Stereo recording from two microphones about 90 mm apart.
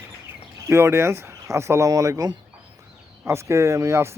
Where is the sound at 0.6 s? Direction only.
30° right (ahead or behind).